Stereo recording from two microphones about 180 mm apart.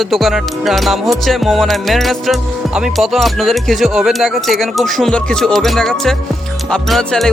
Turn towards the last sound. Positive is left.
turn(degrees=0)  # may be behind; listen again after turning